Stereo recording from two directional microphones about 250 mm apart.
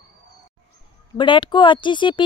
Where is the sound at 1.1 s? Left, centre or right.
Centre.